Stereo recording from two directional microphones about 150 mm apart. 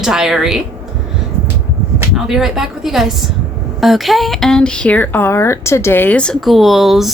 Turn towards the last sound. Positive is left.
turn(degrees=0)  # may be behind; listen again after turning